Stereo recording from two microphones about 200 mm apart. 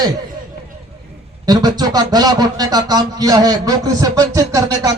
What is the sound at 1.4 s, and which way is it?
Speech, 20° right (ahead or behind).